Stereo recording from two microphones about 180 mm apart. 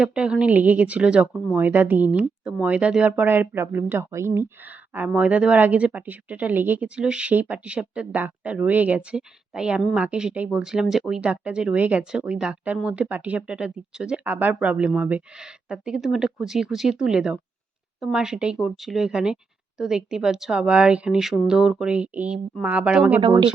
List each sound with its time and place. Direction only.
0.0 s a woman's voice: 5° right (ahead or behind)
23.2 s speech: 25° right (ahead or behind)